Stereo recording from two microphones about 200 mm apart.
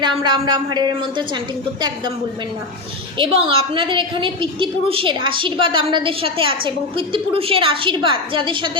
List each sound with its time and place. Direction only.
0.0 s a woman's voice: 20° right (ahead or behind)
3.2 s a woman's voice: 25° right (ahead or behind)